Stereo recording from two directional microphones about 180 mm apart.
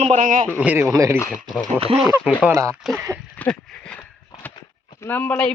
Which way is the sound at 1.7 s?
30° right (ahead or behind).